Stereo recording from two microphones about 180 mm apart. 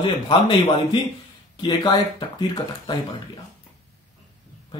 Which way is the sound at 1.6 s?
25° left (ahead or behind).